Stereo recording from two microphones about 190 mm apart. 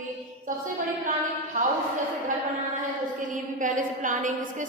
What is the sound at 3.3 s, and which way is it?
A woman's voice, 40° right (ahead or behind).